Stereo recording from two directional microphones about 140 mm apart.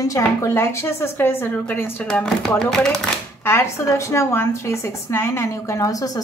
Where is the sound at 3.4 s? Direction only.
20° left (ahead or behind).